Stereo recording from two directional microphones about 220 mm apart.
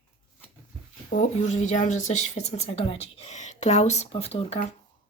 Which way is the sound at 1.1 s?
35° left (ahead or behind).